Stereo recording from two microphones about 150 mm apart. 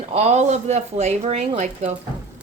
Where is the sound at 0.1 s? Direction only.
45° right (ahead or behind).